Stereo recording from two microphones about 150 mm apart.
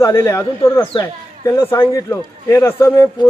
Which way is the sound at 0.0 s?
20° left (ahead or behind).